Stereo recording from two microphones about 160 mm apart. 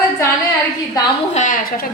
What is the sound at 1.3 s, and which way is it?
Speech, 50° left (ahead or behind).